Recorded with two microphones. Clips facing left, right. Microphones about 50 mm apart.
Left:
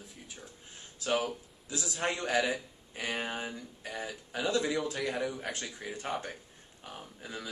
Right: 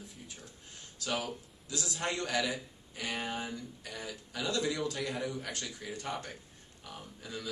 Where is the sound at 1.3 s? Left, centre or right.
Centre.